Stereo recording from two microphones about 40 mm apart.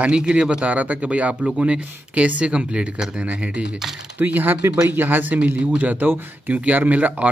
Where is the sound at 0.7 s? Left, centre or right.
Right.